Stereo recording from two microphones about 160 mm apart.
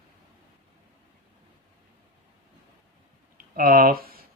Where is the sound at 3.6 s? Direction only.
65° right (ahead or behind).